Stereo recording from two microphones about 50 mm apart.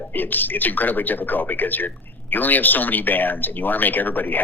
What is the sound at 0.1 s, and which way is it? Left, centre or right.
Speech, left.